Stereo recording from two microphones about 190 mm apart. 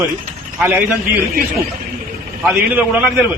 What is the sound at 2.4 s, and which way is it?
Speech, 10° right (ahead or behind).